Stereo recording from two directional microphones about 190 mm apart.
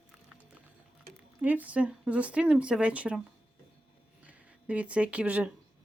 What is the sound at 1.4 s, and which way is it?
Speech, 10° right (ahead or behind).